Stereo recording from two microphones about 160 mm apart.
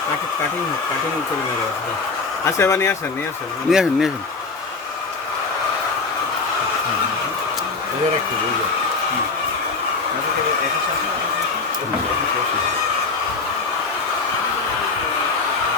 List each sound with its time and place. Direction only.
2.4 s speech: 15° left (ahead or behind)
3.7 s speech: 5° right (ahead or behind)